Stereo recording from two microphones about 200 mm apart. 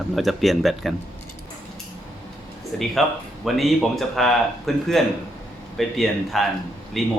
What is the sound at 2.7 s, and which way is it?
Speech, 5° left (ahead or behind).